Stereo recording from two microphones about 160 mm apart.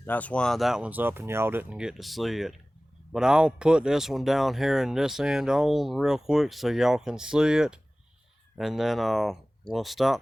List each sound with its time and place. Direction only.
0.0 s speech: 10° left (ahead or behind)